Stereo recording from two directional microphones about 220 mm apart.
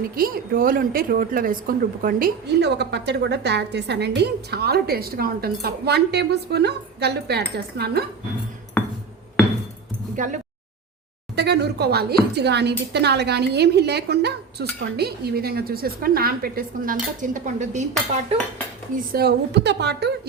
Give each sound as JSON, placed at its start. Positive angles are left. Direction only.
{"t": 0.2, "sound": "a woman's voice", "side_deg": -40}
{"t": 8.8, "sound": "music", "side_deg": 10}
{"t": 10.2, "sound": "speech", "side_deg": -35}
{"t": 11.3, "sound": "a woman's voice", "side_deg": -50}
{"t": 18.3, "sound": "dishes", "side_deg": -30}
{"t": 19.1, "sound": "a woman's voice", "side_deg": -50}